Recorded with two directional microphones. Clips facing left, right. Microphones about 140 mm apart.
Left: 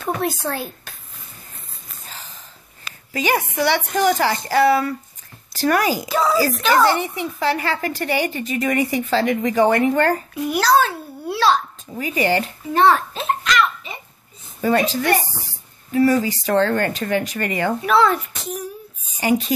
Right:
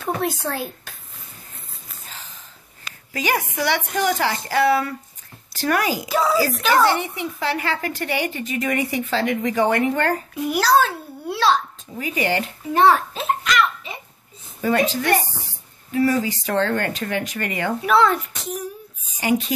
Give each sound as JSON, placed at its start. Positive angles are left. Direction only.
{"t": 0.0, "sound": "speech", "side_deg": 0}
{"t": 3.1, "sound": "a woman's voice", "side_deg": 25}
{"t": 6.0, "sound": "a child's voice", "side_deg": -5}
{"t": 6.9, "sound": "a woman's voice", "side_deg": 35}
{"t": 10.5, "sound": "a child's voice", "side_deg": -5}
{"t": 12.0, "sound": "a woman's voice", "side_deg": 35}
{"t": 12.7, "sound": "a sound", "side_deg": -10}
{"t": 14.6, "sound": "a woman's voice", "side_deg": 35}
{"t": 17.8, "sound": "a child's voice", "side_deg": 0}
{"t": 19.1, "sound": "speech", "side_deg": 35}